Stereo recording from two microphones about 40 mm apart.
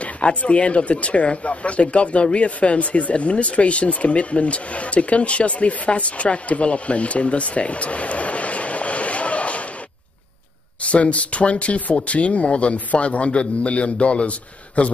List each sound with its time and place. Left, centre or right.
0.0 s speech: left
10.8 s speech: left